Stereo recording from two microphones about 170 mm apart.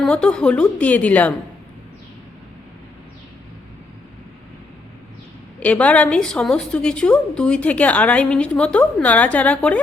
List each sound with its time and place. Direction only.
0.0 s a woman's voice: 5° left (ahead or behind)
5.5 s a woman's voice: 10° left (ahead or behind)